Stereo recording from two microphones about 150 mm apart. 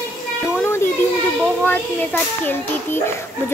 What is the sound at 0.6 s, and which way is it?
Children playing, 15° left (ahead or behind).